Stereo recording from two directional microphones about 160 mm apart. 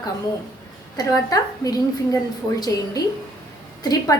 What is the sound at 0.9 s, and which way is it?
A woman's voice, 20° left (ahead or behind).